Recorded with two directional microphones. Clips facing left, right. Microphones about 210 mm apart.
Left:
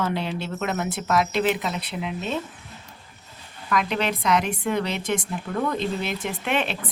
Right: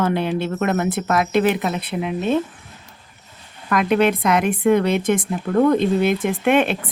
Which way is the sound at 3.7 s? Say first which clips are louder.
Right 8 dB; 55° right (ahead or behind).